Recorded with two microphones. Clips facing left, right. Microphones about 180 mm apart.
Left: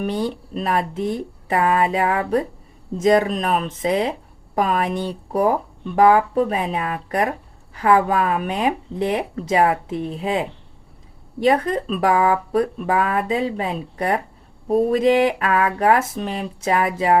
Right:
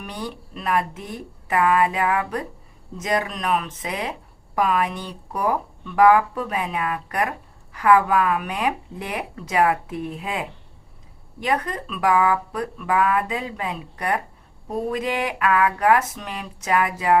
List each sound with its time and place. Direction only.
0.0 s speech: 30° left (ahead or behind)
4.9 s speech: 25° left (ahead or behind)